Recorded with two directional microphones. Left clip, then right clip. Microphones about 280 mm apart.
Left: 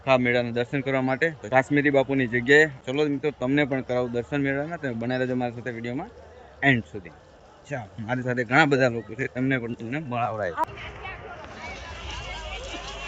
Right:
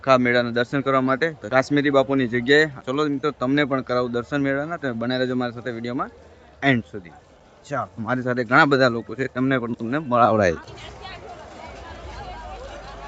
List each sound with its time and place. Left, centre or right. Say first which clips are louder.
0.0 s a man's voice: right 4 dB; centre